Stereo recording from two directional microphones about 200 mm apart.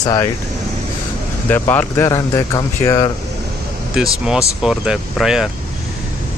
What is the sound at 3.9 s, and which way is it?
Speech, centre (ahead or behind).